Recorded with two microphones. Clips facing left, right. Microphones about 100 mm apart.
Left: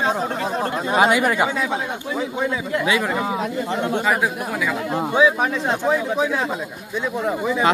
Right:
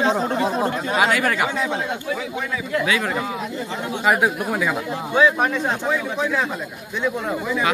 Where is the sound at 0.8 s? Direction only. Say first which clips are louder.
Left 5 dB; 25° left (ahead or behind).